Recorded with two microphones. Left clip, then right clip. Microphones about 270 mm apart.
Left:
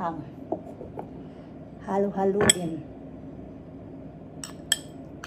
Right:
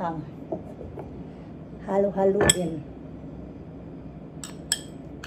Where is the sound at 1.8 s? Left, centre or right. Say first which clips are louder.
Right 3 dB; centre.